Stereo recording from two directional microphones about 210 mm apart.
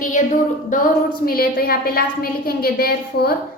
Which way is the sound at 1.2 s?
45° left (ahead or behind).